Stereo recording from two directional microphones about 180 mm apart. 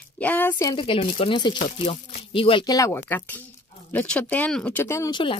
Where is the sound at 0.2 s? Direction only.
10° left (ahead or behind).